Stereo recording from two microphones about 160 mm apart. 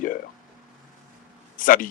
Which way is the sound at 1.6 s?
60° left (ahead or behind).